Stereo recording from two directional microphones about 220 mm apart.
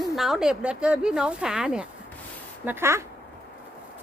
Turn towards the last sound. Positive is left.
turn(degrees=-10)  # may be behind; listen again after turning